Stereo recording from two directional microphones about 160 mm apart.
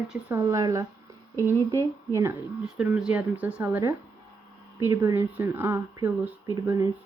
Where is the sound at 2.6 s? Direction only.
5° right (ahead or behind).